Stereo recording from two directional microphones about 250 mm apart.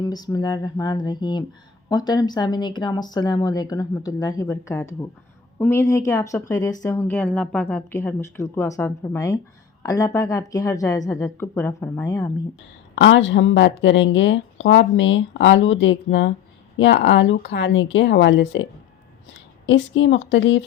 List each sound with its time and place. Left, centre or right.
0.0 s speech: centre
13.0 s a woman's voice: left